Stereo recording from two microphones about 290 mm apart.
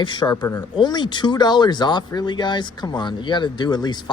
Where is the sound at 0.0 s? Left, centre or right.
Centre.